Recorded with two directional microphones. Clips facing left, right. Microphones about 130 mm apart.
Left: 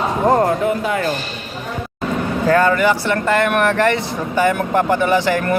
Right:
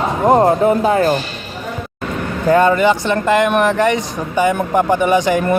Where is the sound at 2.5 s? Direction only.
20° right (ahead or behind).